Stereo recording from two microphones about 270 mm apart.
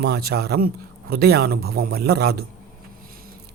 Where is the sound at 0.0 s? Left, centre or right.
Right.